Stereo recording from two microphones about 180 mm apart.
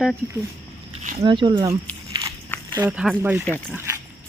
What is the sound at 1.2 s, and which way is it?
Speech, 25° right (ahead or behind).